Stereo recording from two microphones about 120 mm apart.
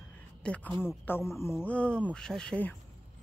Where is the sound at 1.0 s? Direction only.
20° left (ahead or behind).